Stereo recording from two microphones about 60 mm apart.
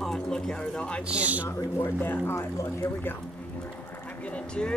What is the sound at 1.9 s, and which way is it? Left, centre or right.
Speech, left.